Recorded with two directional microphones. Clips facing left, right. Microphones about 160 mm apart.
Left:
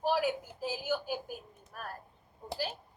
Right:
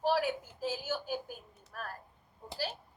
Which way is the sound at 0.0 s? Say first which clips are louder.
Even; 15° left (ahead or behind).